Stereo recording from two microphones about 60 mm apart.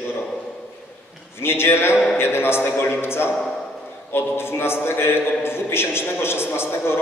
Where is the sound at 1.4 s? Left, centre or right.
Left.